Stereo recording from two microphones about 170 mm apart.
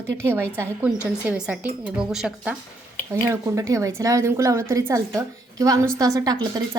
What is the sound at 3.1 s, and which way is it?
Speech, 15° right (ahead or behind).